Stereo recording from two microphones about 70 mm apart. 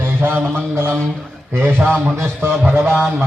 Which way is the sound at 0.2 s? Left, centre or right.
Right.